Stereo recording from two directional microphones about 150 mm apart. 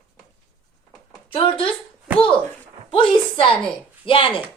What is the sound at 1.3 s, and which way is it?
Speech, 35° left (ahead or behind).